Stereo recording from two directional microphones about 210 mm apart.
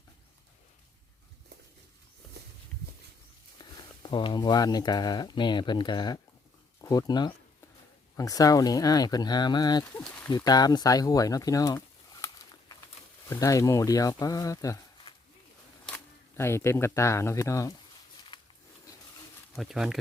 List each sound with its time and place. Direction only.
3.6 s speech: 20° left (ahead or behind)
16.4 s speech: 10° left (ahead or behind)
18.3 s a sound: 20° left (ahead or behind)
19.5 s speech: centre (ahead or behind)